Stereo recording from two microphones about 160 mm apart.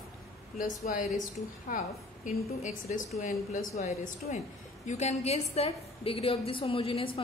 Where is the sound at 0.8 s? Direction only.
50° left (ahead or behind).